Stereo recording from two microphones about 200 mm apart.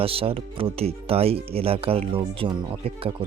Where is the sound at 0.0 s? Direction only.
30° right (ahead or behind).